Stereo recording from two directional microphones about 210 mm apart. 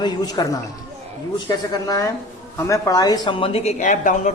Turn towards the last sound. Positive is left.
turn(degrees=35)  # may be behind; listen again after turning